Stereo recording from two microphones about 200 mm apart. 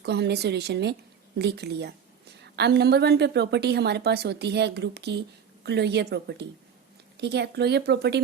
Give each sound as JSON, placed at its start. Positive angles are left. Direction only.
{"t": 0.0, "sound": "a woman's voice", "side_deg": -55}